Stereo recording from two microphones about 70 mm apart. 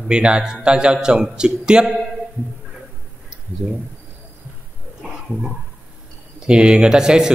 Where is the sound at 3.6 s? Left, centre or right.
Centre.